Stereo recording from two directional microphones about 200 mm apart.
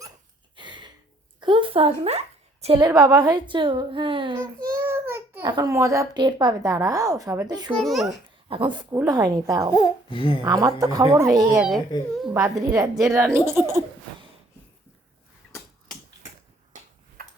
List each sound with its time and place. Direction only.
0.5 s a sound: 25° right (ahead or behind)
1.4 s a woman's voice: 25° right (ahead or behind)
4.7 s a child's voice: 15° right (ahead or behind)
7.7 s a child's voice: centre (ahead or behind)
8.4 s a woman's voice: 25° right (ahead or behind)
9.7 s speech: 25° left (ahead or behind)
10.4 s speech: 20° right (ahead or behind)